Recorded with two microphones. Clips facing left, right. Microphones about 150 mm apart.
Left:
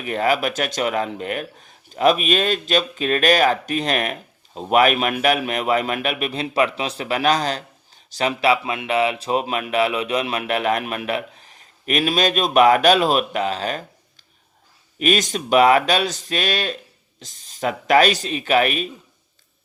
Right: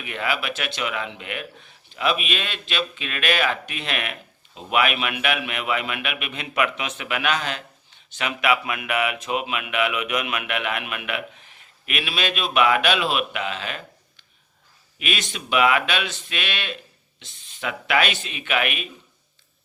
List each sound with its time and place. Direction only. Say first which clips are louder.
0.0 s speech: left 7 dB; 40° left (ahead or behind)
14.9 s speech: left 10 dB; 40° left (ahead or behind)